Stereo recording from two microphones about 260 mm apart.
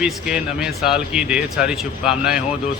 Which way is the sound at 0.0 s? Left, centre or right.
Centre.